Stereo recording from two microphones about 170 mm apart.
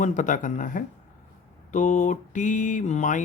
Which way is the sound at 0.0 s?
45° left (ahead or behind).